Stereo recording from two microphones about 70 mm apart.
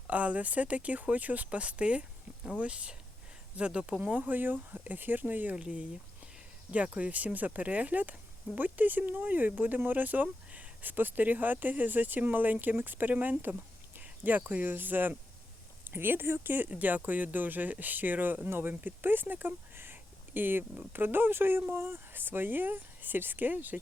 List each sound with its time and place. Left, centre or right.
0.1 s speech: right
5.5 s speech: centre